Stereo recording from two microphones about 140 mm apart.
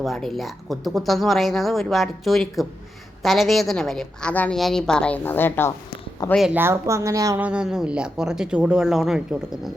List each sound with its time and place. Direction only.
0.0 s speech: centre (ahead or behind)
6.5 s a woman's voice: 15° right (ahead or behind)
7.3 s speech: 10° right (ahead or behind)